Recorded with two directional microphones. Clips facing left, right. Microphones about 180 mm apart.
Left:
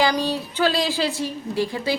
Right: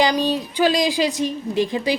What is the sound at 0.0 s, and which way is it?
A woman's voice, 15° right (ahead or behind).